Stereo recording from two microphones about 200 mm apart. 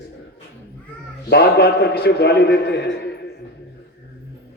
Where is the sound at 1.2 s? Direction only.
55° left (ahead or behind).